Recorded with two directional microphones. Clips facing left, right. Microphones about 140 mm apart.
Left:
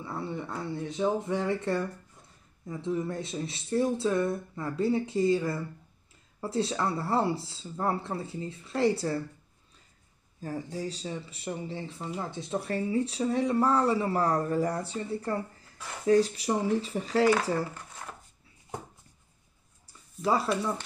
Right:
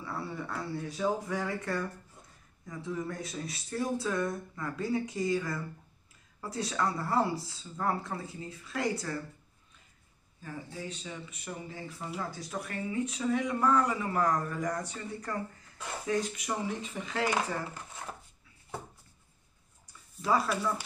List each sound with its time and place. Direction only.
0.0 s speech: 25° left (ahead or behind)
10.4 s speech: 35° left (ahead or behind)